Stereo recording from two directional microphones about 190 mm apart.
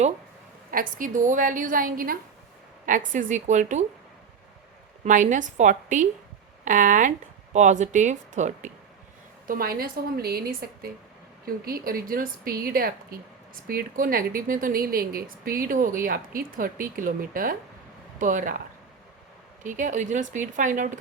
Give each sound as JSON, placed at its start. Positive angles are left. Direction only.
{"t": 0.7, "sound": "a woman's voice", "side_deg": -45}
{"t": 5.0, "sound": "a woman's voice", "side_deg": -40}
{"t": 9.5, "sound": "a woman's voice", "side_deg": -50}
{"t": 19.6, "sound": "a woman's voice", "side_deg": -45}